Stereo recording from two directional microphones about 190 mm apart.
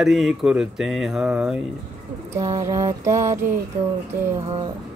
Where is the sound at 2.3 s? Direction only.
15° right (ahead or behind).